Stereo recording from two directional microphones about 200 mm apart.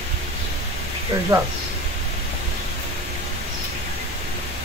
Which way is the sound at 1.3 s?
20° right (ahead or behind).